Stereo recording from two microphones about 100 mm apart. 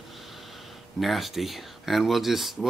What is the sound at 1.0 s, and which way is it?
Speech, centre (ahead or behind).